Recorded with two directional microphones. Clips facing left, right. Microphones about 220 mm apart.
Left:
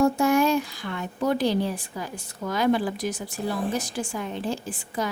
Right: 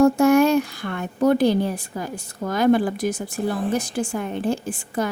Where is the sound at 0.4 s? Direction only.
60° right (ahead or behind).